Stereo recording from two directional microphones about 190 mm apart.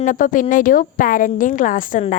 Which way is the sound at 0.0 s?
45° left (ahead or behind).